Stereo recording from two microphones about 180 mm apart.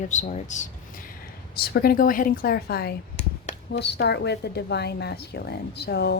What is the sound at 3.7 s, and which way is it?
A woman's voice, 65° left (ahead or behind).